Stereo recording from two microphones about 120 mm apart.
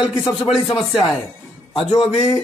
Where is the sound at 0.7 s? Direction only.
40° left (ahead or behind).